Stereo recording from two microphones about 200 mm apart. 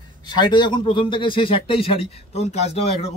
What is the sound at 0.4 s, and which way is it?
Speech, 20° left (ahead or behind).